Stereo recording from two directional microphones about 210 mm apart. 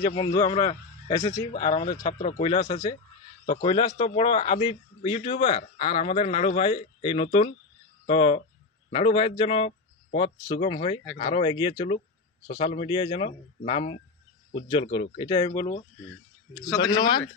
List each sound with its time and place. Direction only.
0.4 s a man's voice: 20° left (ahead or behind)
2.1 s speech: 40° left (ahead or behind)
2.7 s a man's voice: 20° left (ahead or behind)